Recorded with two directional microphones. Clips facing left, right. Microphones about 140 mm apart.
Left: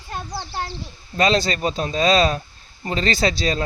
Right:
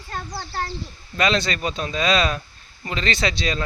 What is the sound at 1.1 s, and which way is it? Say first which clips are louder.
Speech: left 3 dB; 35° left (ahead or behind).